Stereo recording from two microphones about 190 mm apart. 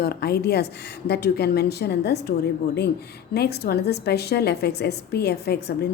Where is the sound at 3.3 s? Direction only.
55° left (ahead or behind).